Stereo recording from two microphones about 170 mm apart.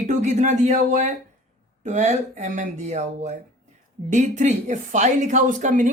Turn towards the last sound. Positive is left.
turn(degrees=-50)  # may be behind; listen again after turning